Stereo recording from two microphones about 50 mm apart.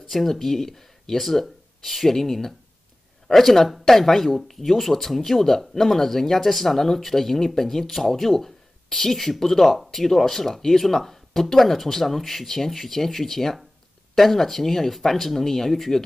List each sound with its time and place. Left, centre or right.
0.1 s speech: centre